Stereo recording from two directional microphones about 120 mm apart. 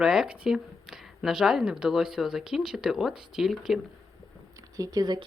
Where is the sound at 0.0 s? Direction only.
5° right (ahead or behind).